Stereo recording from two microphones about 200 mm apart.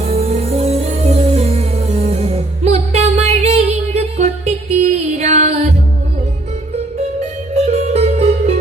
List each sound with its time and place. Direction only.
0.0 s music: 30° right (ahead or behind)
7.5 s music: 30° right (ahead or behind)